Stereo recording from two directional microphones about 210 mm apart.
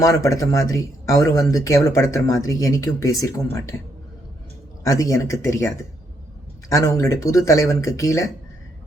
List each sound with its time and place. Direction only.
0.0 s speech: 15° left (ahead or behind)
4.8 s speech: 15° left (ahead or behind)